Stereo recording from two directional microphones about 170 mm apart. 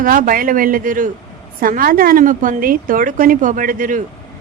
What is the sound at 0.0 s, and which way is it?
A woman's voice, 55° right (ahead or behind).